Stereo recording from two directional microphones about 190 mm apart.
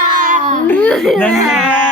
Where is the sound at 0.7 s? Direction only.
10° left (ahead or behind).